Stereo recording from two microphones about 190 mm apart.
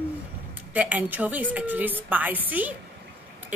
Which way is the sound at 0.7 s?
10° right (ahead or behind).